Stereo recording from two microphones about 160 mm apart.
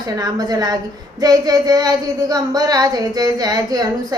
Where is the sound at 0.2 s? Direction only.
25° right (ahead or behind).